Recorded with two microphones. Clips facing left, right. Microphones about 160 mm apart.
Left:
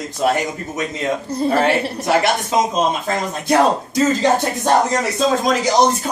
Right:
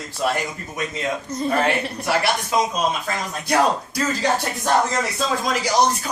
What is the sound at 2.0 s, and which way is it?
A man's voice, 20° left (ahead or behind).